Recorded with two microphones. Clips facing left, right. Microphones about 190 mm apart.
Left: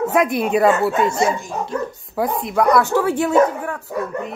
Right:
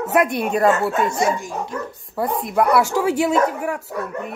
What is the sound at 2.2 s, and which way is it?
A woman's voice, 5° right (ahead or behind).